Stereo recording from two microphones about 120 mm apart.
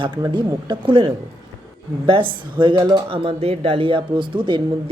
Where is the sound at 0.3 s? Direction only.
40° right (ahead or behind).